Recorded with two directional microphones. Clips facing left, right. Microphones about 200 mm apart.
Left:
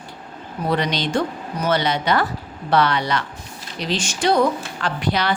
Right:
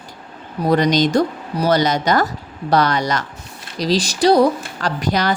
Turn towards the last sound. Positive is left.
turn(degrees=-40)  # may be behind; listen again after turning